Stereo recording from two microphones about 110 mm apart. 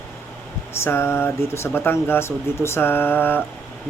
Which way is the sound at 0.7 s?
20° left (ahead or behind).